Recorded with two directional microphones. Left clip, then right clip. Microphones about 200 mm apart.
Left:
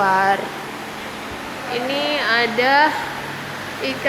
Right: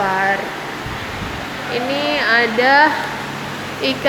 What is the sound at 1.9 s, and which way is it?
Speech, centre (ahead or behind).